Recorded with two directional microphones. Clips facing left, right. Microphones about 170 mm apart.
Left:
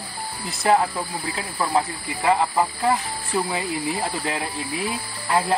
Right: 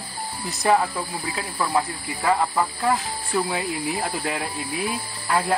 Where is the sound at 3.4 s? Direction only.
Centre (ahead or behind).